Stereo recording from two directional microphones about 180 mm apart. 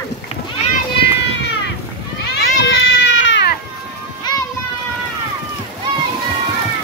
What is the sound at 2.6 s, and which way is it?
Baby cry, 65° left (ahead or behind).